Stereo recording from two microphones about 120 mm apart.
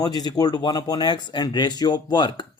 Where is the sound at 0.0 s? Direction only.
35° left (ahead or behind).